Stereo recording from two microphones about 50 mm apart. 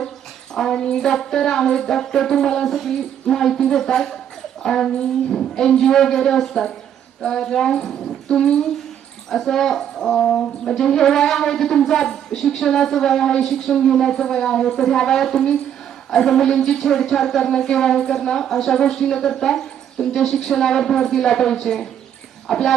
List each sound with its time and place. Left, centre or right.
0.5 s speech: centre